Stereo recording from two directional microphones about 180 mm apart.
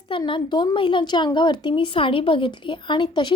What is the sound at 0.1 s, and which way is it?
A woman's voice, 30° left (ahead or behind).